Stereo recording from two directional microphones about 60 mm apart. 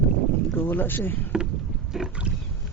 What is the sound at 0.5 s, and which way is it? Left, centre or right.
Speech, left.